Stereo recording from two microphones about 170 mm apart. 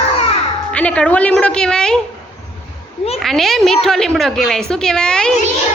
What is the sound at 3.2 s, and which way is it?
A child's voice, centre (ahead or behind).